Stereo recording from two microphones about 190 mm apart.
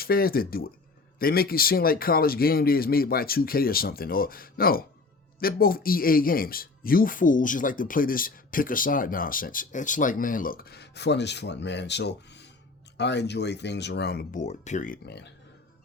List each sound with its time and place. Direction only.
0.0 s speech: 50° left (ahead or behind)
14.4 s speech: 40° left (ahead or behind)
15.0 s speech: 60° left (ahead or behind)